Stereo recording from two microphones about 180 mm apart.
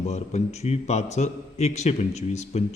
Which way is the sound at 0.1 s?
40° left (ahead or behind).